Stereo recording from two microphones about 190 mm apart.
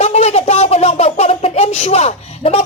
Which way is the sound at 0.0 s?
35° left (ahead or behind).